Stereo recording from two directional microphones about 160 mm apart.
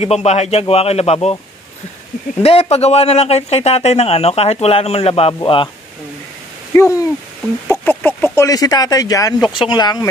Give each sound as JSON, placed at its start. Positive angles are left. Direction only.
{"t": 0.0, "sound": "speech", "side_deg": 40}
{"t": 2.4, "sound": "speech", "side_deg": 35}
{"t": 6.7, "sound": "speech", "side_deg": 20}